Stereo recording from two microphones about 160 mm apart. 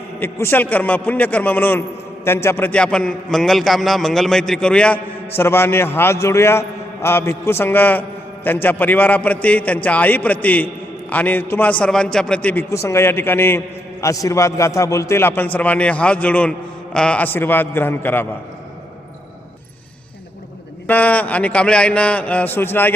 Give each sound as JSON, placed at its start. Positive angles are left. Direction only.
{"t": 0.2, "sound": "a man's voice", "side_deg": 15}
{"t": 20.8, "sound": "a man's voice", "side_deg": 10}